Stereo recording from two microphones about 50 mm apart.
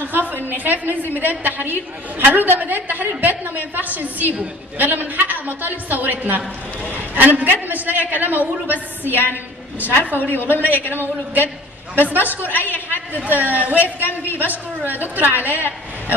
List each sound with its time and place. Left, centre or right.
0.0 s a woman's voice: right
9.8 s a woman's voice: right
11.9 s a woman's voice: right
12.7 s a man's voice: left
13.2 s a woman's voice: right